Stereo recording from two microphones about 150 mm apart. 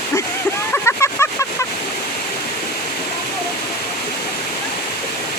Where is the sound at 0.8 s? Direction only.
20° left (ahead or behind).